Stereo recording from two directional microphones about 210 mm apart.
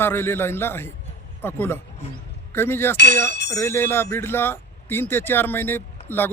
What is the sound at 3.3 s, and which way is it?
Speech, 55° left (ahead or behind).